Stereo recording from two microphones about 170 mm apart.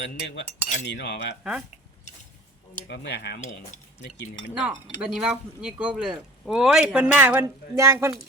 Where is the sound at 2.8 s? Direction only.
85° left.